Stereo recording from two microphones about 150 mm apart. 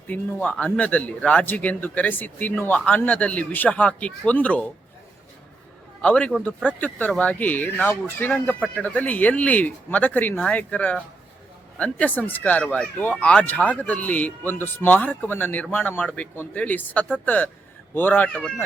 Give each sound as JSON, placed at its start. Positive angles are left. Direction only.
{"t": 0.1, "sound": "a man's voice", "side_deg": 10}
{"t": 6.0, "sound": "a man's voice", "side_deg": 10}